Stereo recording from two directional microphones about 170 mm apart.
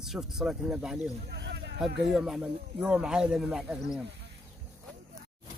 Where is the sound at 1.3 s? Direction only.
90° right.